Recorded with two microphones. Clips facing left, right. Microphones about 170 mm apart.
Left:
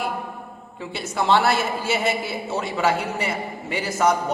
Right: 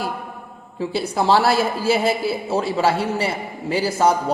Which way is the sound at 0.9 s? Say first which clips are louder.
Right 2 dB; 35° right (ahead or behind).